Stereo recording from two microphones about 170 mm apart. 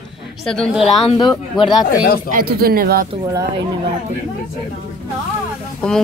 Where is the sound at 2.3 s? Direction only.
60° right (ahead or behind).